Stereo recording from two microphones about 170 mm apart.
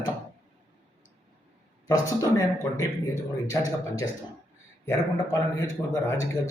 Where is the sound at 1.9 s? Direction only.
20° left (ahead or behind).